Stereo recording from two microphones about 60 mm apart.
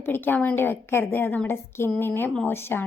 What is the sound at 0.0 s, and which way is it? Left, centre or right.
A woman's voice, left.